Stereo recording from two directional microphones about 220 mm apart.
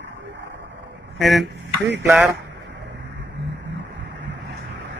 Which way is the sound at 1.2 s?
Centre (ahead or behind).